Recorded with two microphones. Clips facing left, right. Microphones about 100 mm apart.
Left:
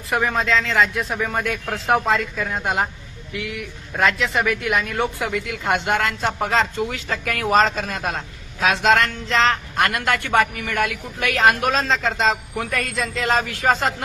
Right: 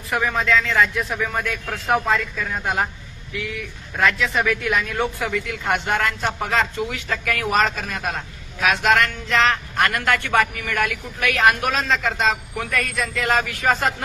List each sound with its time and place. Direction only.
0.1 s speech: 20° left (ahead or behind)
3.9 s speech: 25° left (ahead or behind)